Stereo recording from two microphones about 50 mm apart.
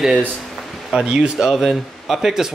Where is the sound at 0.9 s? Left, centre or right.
Right.